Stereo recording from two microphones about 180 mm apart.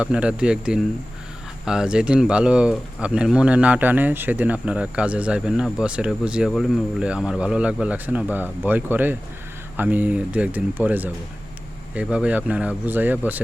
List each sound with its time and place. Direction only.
0.0 s speech: 5° right (ahead or behind)